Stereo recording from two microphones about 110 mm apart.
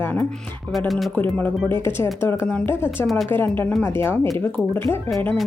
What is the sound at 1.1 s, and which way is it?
Speech, 15° left (ahead or behind).